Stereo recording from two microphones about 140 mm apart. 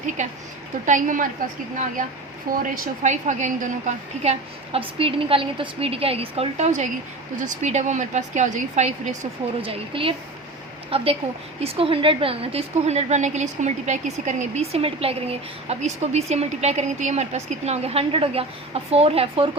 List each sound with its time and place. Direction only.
0.2 s a woman's voice: 65° right (ahead or behind)
2.5 s a woman's voice: 75° right (ahead or behind); by 8.9 s 55° right (ahead or behind)
9.6 s a woman's voice: 40° right (ahead or behind)